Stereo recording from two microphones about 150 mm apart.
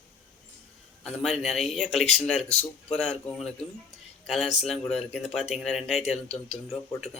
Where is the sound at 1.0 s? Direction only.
Centre (ahead or behind).